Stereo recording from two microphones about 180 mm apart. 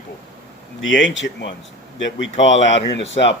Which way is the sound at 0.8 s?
90° left.